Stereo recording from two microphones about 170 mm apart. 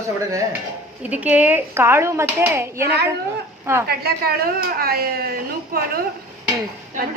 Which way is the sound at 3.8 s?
65° right (ahead or behind).